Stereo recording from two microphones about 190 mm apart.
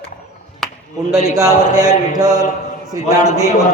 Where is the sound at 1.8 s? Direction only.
20° right (ahead or behind).